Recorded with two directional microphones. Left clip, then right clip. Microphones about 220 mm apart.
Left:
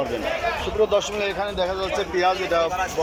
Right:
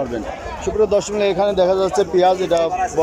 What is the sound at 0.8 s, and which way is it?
A man's voice, 20° right (ahead or behind).